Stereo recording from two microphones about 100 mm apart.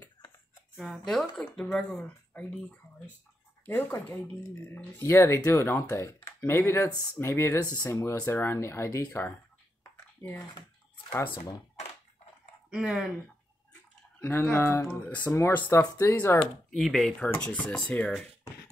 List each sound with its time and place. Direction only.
0.7 s speech: centre (ahead or behind)
3.6 s speech: 20° left (ahead or behind)
6.9 s speech: 40° left (ahead or behind)
7.2 s speech: 25° left (ahead or behind)
12.6 s speech: 5° right (ahead or behind)
14.2 s speech: 20° left (ahead or behind)
14.9 s speech: 15° left (ahead or behind)
15.7 s speech: 30° left (ahead or behind)
16.7 s speech: centre (ahead or behind)